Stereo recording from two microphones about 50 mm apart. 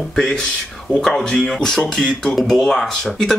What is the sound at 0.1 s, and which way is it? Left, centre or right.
Speech, centre.